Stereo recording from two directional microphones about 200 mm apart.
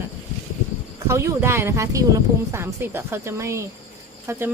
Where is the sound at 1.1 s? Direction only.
15° right (ahead or behind).